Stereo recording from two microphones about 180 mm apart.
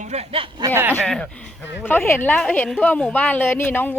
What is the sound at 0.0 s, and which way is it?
Speech, 35° right (ahead or behind).